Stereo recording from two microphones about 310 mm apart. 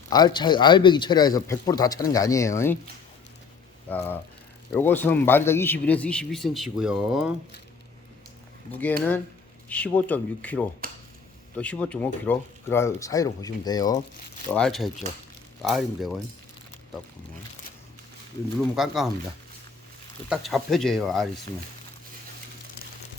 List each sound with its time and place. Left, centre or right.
0.1 s speech: centre
3.8 s speech: centre
8.7 s speech: centre
10.8 s speech: right
11.5 s speech: centre
14.5 s speech: centre
18.8 s speech: centre
20.3 s speech: centre